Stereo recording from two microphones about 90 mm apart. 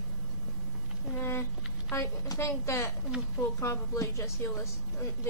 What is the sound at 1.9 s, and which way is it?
A woman's voice, 30° left (ahead or behind).